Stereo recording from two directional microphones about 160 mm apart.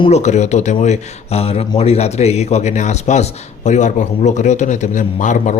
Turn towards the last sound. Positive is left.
turn(degrees=50)  # may be behind; listen again after turning